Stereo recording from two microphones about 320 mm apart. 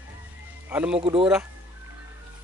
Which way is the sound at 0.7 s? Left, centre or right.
Centre.